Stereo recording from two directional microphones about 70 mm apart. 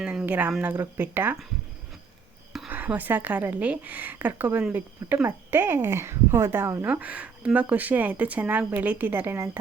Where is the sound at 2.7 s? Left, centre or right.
Right.